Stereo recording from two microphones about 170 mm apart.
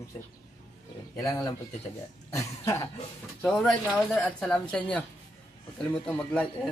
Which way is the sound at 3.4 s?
5° left (ahead or behind).